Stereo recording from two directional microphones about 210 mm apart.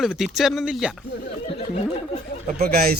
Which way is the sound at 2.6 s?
45° right (ahead or behind).